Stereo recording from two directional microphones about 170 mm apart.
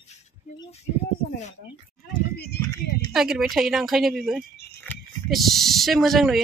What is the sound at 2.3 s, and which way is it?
Speech, 75° left (ahead or behind).